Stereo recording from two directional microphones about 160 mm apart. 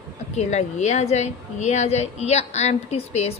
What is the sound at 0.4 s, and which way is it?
A woman's voice, 45° left (ahead or behind).